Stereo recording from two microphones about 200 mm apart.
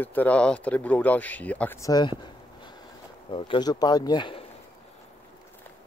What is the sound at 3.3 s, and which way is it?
Speech, 25° left (ahead or behind).